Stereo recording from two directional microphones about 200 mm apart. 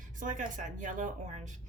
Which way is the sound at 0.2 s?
40° right (ahead or behind).